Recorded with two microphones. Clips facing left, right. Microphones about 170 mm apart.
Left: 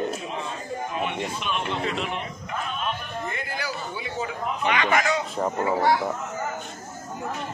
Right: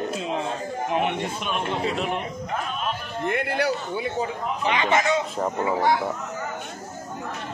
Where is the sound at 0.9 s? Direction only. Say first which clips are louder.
Right 6 dB; 65° right (ahead or behind).